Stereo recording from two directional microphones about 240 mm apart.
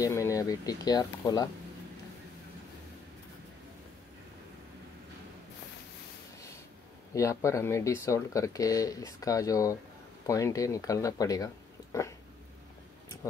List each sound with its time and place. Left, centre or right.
0.0 s speech: centre
7.2 s speech: centre